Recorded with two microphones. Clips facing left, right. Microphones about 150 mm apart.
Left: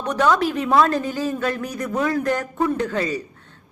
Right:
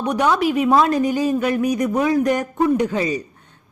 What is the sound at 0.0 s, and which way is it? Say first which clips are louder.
A woman's voice: right 1 dB; 15° right (ahead or behind).